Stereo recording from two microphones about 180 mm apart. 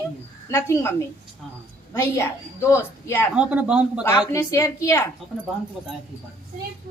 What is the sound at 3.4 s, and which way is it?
Speech, 5° right (ahead or behind).